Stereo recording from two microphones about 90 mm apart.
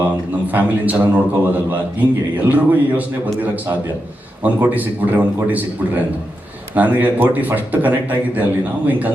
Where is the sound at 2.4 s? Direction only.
20° right (ahead or behind).